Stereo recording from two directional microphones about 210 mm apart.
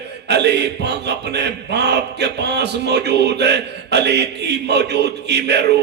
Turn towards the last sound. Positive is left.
turn(degrees=-55)  # may be behind; listen again after turning